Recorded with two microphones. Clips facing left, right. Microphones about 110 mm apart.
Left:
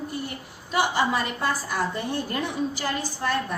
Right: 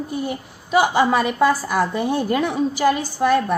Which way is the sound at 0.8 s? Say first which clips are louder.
Right 5 dB; 65° right (ahead or behind).